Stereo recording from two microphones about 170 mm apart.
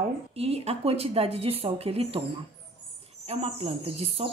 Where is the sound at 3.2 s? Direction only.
35° right (ahead or behind).